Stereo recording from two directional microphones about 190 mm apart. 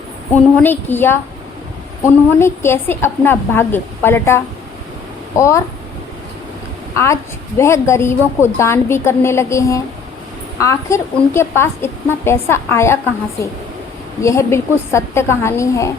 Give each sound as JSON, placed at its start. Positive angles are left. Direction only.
{"t": 0.3, "sound": "a woman's voice", "side_deg": 10}
{"t": 2.4, "sound": "a woman's voice", "side_deg": 15}
{"t": 5.4, "sound": "a woman's voice", "side_deg": 15}
{"t": 6.9, "sound": "a woman's voice", "side_deg": 15}